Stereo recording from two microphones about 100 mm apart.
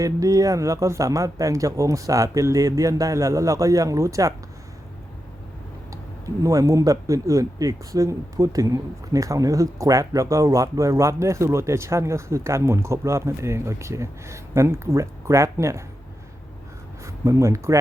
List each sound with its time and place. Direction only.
0.0 s speech: 35° right (ahead or behind)
5.9 s speech: 35° right (ahead or behind)
17.1 s speech: 30° right (ahead or behind)